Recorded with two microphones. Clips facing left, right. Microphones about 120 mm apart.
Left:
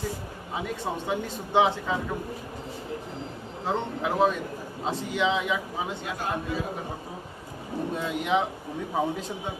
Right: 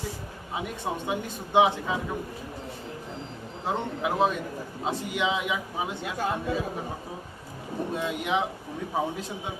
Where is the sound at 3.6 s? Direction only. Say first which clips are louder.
Left 1 dB; 5° right (ahead or behind).